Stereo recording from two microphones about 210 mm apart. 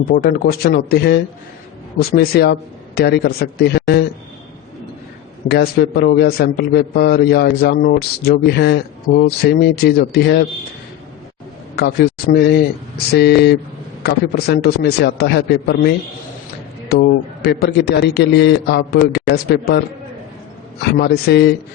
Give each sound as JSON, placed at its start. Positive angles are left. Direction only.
{"t": 0.1, "sound": "a man's voice", "side_deg": 45}
{"t": 5.5, "sound": "a man's voice", "side_deg": 50}
{"t": 11.8, "sound": "a man's voice", "side_deg": 50}
{"t": 21.0, "sound": "a man's voice", "side_deg": 50}